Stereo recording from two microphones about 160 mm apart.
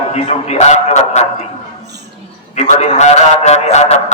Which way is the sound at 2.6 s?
45° left (ahead or behind).